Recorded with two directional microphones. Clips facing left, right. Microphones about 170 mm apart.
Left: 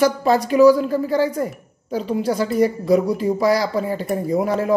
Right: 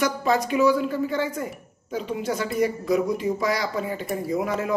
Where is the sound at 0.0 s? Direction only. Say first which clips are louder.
Left 6 dB; 35° left (ahead or behind).